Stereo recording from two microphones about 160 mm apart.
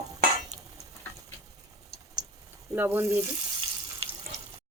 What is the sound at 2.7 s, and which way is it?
Speech, 10° right (ahead or behind).